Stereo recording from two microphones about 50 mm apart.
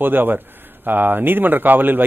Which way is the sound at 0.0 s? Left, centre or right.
Right.